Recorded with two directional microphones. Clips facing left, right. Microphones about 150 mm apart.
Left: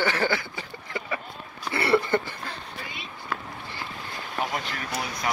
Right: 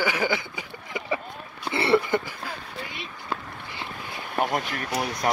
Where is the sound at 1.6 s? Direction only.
25° right (ahead or behind).